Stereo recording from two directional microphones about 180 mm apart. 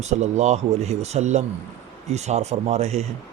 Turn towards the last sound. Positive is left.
turn(degrees=-35)  # may be behind; listen again after turning